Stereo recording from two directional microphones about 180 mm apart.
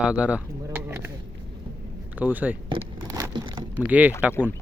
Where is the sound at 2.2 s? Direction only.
10° right (ahead or behind).